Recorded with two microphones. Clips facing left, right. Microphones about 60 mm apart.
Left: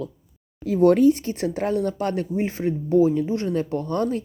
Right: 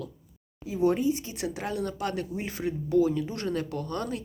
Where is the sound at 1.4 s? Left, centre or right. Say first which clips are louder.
Left 8 dB; left.